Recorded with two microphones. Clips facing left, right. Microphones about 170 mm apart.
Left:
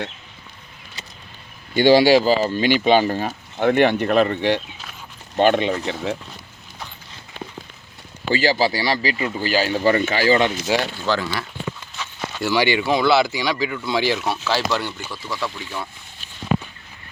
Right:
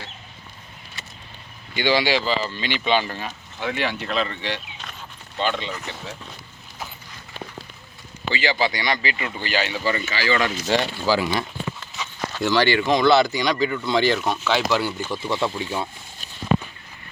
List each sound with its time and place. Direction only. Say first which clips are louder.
1.7 s speech: left 8 dB; 45° left (ahead or behind); by 6.1 s 70° left (ahead or behind)
8.3 s speech: left 4 dB; 45° left (ahead or behind)
10.7 s speech: even; centre (ahead or behind)
15.1 s speech: right 5 dB; 25° right (ahead or behind)
16.5 s a sound: right 1 dB; 45° right (ahead or behind)